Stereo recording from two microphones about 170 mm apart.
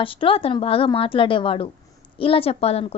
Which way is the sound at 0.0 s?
30° left (ahead or behind).